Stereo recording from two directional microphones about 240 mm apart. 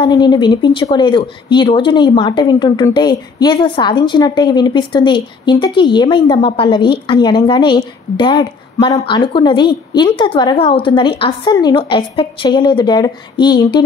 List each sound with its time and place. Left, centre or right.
0.0 s a woman's voice: centre